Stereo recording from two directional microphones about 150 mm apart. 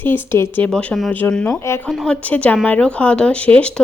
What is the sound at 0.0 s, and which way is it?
Speech, 15° left (ahead or behind).